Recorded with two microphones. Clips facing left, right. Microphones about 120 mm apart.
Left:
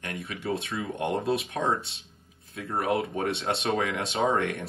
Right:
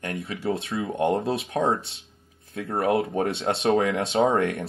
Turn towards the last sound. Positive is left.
turn(degrees=-30)  # may be behind; listen again after turning